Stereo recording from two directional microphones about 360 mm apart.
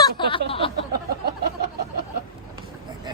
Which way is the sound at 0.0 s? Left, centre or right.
Centre.